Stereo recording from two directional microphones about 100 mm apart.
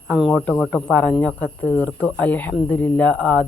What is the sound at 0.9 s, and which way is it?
Speech, 15° left (ahead or behind).